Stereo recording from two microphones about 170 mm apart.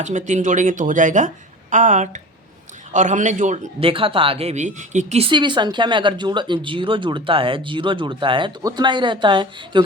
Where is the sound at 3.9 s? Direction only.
30° right (ahead or behind).